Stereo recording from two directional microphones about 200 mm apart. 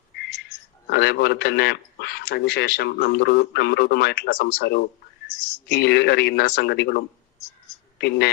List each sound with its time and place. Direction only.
0.9 s a man's voice: 55° left (ahead or behind)